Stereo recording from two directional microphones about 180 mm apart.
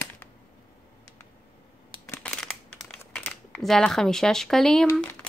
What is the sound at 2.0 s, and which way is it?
Crushing, 15° left (ahead or behind).